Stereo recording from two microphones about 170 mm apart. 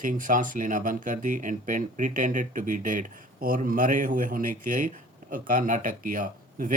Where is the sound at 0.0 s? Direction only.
50° right (ahead or behind).